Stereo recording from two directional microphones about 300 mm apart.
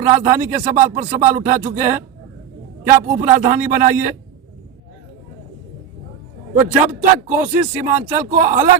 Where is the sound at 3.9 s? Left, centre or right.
Centre.